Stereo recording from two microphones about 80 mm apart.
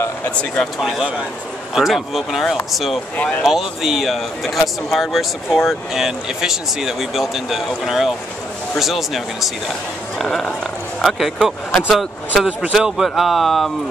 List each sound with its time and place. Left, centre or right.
0.7 s speech: centre
3.2 s speech: left
3.4 s speech: centre